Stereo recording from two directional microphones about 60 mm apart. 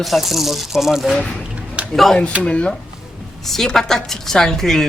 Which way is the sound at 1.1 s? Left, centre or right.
Centre.